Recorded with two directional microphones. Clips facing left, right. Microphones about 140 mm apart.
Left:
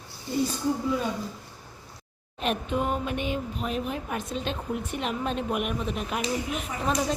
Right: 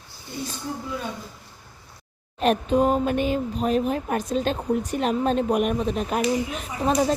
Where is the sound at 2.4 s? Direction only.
35° right (ahead or behind).